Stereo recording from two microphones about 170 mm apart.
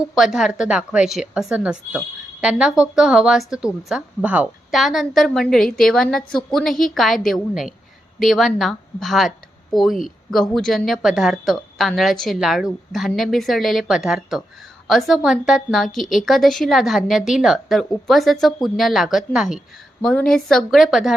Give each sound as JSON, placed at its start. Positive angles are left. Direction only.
{"t": 0.2, "sound": "a woman's voice", "side_deg": 0}